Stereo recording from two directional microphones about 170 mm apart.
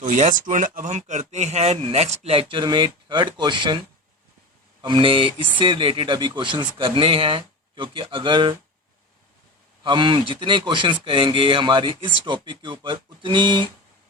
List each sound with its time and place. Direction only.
0.1 s speech: 50° right (ahead or behind); by 3.8 s 25° right (ahead or behind)
4.8 s speech: 30° right (ahead or behind)
9.8 s speech: 30° right (ahead or behind)